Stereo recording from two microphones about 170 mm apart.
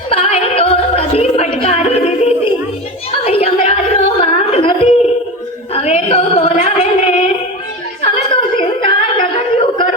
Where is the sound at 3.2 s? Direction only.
35° left (ahead or behind).